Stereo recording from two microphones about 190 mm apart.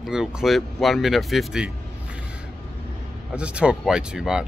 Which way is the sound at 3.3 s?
5° right (ahead or behind).